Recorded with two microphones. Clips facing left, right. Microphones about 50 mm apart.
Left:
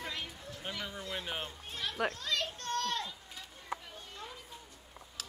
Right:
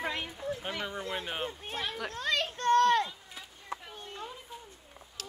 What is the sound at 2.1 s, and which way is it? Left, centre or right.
Children playing, right.